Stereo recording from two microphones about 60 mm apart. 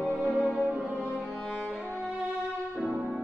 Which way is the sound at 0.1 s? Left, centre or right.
Right.